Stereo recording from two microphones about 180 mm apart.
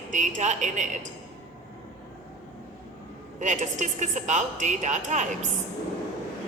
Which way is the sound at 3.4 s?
45° right (ahead or behind).